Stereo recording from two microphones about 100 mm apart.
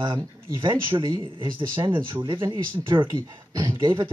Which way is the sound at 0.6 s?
55° right (ahead or behind).